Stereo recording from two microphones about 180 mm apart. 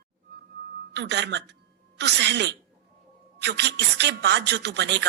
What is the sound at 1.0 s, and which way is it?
Speech, 70° right (ahead or behind).